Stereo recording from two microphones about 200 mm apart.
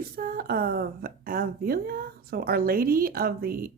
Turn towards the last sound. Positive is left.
turn(degrees=-50)  # may be behind; listen again after turning